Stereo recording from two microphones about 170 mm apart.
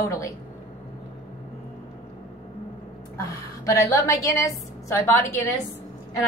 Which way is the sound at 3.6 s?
20° left (ahead or behind).